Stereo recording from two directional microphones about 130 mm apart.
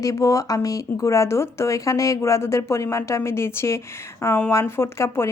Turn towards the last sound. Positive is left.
turn(degrees=20)  # may be behind; listen again after turning